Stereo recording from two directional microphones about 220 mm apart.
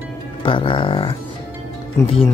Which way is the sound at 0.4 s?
25° left (ahead or behind).